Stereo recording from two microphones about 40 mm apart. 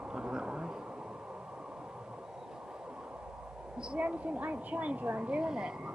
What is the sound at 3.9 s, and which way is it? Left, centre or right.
Speech, right.